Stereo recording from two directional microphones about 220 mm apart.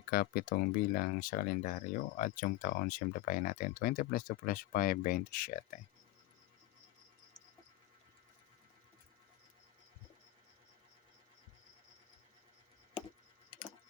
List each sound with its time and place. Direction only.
0.1 s speech: 40° left (ahead or behind)